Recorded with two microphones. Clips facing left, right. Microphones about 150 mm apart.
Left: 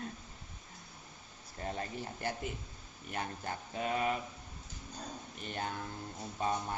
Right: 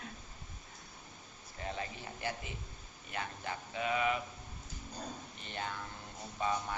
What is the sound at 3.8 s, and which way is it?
Speech, 40° left (ahead or behind).